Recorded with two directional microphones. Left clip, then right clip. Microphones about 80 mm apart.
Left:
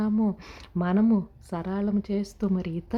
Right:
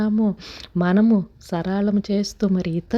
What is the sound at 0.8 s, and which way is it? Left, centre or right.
Speech, right.